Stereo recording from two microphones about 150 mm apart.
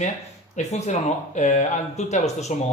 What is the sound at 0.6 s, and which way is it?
Speech, 50° left (ahead or behind).